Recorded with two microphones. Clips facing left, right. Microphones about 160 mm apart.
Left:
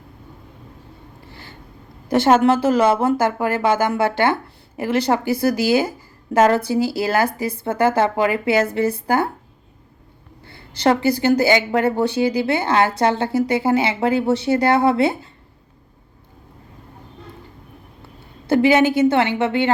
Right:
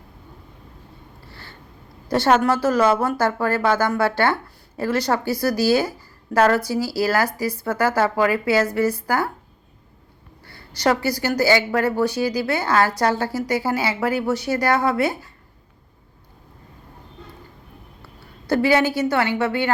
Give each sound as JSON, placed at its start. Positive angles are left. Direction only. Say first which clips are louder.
{"t": 1.3, "sound": "a sound", "louder": "left 2 dB", "side_deg": 15}
{"t": 2.0, "sound": "speech", "louder": "left 3 dB", "side_deg": 20}
{"t": 10.4, "sound": "speech", "louder": "left 3 dB", "side_deg": 25}
{"t": 18.0, "sound": "a woman's voice", "louder": "left 2 dB", "side_deg": 20}